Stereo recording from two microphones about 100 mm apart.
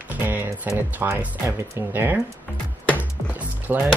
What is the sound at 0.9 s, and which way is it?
Speech, 20° right (ahead or behind).